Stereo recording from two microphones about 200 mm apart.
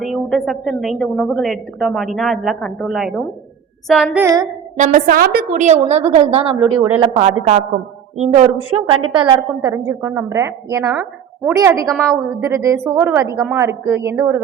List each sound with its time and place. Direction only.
0.0 s a woman's voice: centre (ahead or behind)
4.8 s a woman's voice: 40° right (ahead or behind); by 14.3 s 15° right (ahead or behind)